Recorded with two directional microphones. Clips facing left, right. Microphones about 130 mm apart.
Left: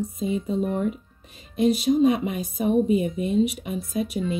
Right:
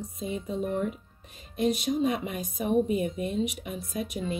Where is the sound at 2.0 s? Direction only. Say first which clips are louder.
Left 7 dB; 5° left (ahead or behind).